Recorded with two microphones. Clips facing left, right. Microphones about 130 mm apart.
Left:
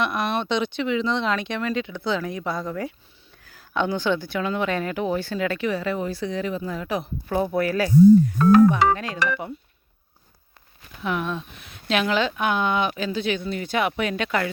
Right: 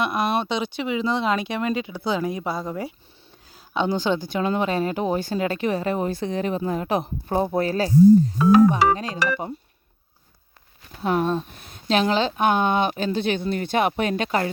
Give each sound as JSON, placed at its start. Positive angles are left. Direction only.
{"t": 0.0, "sound": "speech", "side_deg": -5}
{"t": 3.4, "sound": "a sound", "side_deg": -20}
{"t": 3.9, "sound": "speech", "side_deg": -15}
{"t": 4.4, "sound": "speech", "side_deg": -30}
{"t": 7.3, "sound": "speech", "side_deg": -30}
{"t": 8.4, "sound": "speech", "side_deg": -5}
{"t": 11.0, "sound": "speech", "side_deg": -35}
{"t": 11.9, "sound": "a woman's voice", "side_deg": -30}
{"t": 12.4, "sound": "a woman's voice", "side_deg": -45}